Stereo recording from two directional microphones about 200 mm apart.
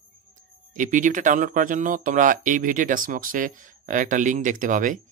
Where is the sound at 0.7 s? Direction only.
40° right (ahead or behind).